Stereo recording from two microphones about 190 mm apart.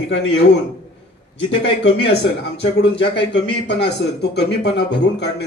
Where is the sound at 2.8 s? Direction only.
65° left (ahead or behind).